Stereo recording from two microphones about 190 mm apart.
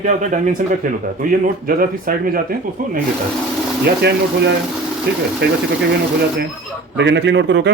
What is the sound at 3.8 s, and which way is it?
Speech, 60° right (ahead or behind).